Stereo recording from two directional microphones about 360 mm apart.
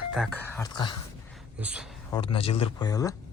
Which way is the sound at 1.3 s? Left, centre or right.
Centre.